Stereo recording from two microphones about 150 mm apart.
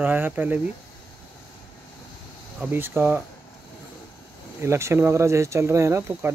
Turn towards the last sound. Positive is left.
turn(degrees=-20)  # may be behind; listen again after turning